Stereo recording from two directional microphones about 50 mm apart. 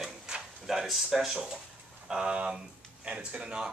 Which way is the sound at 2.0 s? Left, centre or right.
Centre.